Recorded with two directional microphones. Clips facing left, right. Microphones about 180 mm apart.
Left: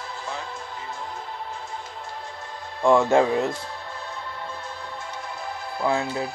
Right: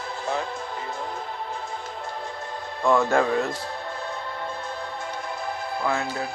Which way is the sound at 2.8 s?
25° left (ahead or behind).